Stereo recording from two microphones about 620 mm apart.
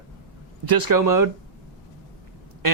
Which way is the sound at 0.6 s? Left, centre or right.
Right.